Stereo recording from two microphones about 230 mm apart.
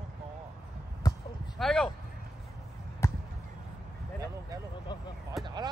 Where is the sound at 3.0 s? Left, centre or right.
Centre.